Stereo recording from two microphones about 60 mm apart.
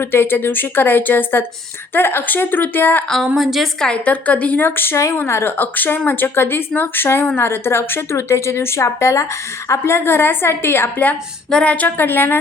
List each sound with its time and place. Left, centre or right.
0.0 s speech: left
3.2 s a woman's voice: centre
3.8 s a woman's voice: centre
4.6 s speech: left
11.6 s a woman's voice: left
11.9 s speech: left